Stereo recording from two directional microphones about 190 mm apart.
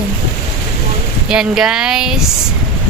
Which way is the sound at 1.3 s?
5° right (ahead or behind).